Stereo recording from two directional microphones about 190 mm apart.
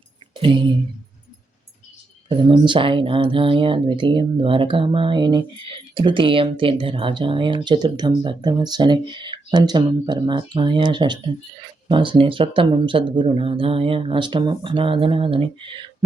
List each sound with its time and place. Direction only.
2.3 s speech: 25° right (ahead or behind)